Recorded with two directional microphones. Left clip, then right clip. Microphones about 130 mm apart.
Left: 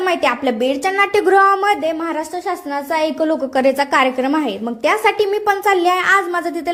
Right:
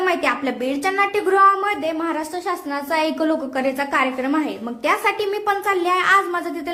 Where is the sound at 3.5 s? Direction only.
40° left (ahead or behind).